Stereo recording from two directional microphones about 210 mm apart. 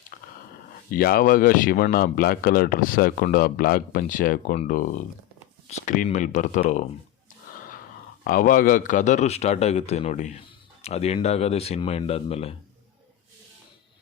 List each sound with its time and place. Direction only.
0.1 s a sound: 40° left (ahead or behind)
0.9 s a man's voice: 45° left (ahead or behind)
8.2 s a man's voice: 40° left (ahead or behind)